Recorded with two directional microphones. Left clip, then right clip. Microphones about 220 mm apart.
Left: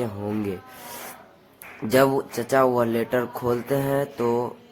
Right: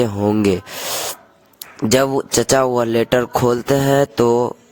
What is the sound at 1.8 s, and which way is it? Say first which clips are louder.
Speech: right 4 dB; 40° right (ahead or behind).